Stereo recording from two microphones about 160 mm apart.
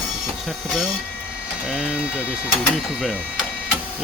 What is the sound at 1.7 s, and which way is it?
Speech, 5° right (ahead or behind).